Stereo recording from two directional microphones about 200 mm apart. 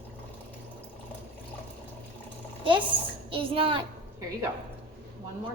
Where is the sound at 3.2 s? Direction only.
25° right (ahead or behind).